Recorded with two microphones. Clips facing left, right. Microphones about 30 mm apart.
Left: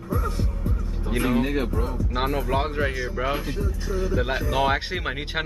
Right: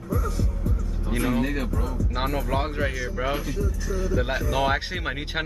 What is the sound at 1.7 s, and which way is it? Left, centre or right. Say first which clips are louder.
Speech: left 2 dB; left.